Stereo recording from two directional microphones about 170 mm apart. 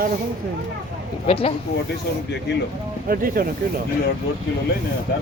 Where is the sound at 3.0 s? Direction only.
60° right (ahead or behind).